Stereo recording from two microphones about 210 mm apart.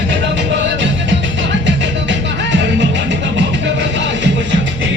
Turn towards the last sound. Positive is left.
turn(degrees=-60)  # may be behind; listen again after turning